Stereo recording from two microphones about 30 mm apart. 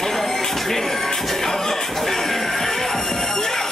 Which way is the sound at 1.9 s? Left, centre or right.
Centre.